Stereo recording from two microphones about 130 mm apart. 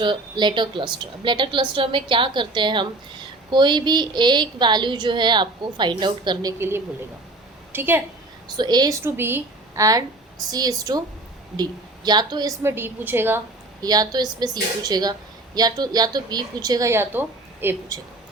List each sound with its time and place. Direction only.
0.0 s a woman's voice: 35° right (ahead or behind)
6.6 s a woman's voice: 20° right (ahead or behind)
8.4 s a woman's voice: 30° right (ahead or behind)
9.0 s a woman's voice: 15° right (ahead or behind); by 12.5 s 35° right (ahead or behind)
12.6 s a woman's voice: 20° right (ahead or behind)
13.8 s a woman's voice: 30° right (ahead or behind)